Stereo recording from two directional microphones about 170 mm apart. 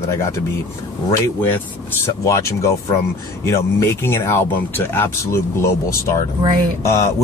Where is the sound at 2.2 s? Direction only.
20° left (ahead or behind).